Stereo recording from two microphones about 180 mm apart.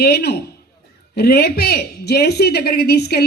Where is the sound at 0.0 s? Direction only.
60° left (ahead or behind).